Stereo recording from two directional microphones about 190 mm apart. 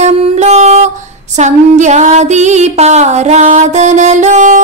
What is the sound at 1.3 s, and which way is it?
Music, 40° right (ahead or behind).